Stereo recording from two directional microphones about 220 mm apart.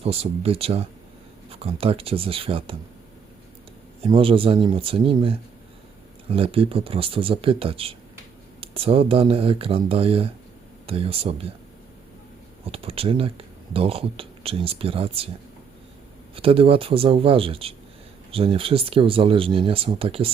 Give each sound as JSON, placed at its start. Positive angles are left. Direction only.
{"t": 0.0, "sound": "speech", "side_deg": -25}
{"t": 4.0, "sound": "speech", "side_deg": -25}
{"t": 12.6, "sound": "speech", "side_deg": -25}
{"t": 16.3, "sound": "speech", "side_deg": -25}